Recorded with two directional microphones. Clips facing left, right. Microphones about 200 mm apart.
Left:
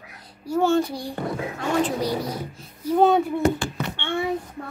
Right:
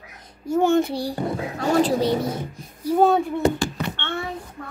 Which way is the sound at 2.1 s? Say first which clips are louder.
Right 4 dB; 25° right (ahead or behind).